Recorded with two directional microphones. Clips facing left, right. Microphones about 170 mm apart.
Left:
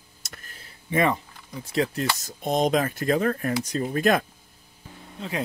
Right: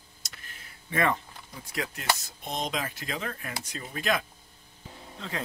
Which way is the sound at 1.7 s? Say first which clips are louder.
Left 6 dB; 35° left (ahead or behind).